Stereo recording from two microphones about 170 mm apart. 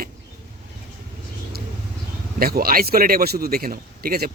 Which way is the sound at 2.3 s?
60° right (ahead or behind).